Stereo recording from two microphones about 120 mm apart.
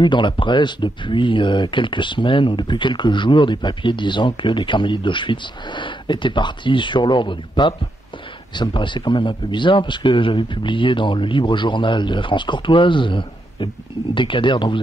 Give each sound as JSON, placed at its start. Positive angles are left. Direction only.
{"t": 0.0, "sound": "a man's voice", "side_deg": 40}